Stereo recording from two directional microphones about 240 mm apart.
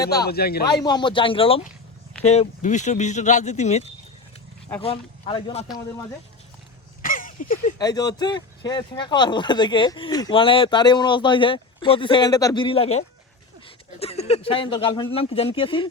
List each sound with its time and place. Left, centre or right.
0.3 s a man's voice: left
0.6 s speech: centre
7.0 s a sound: left
7.8 s speech: centre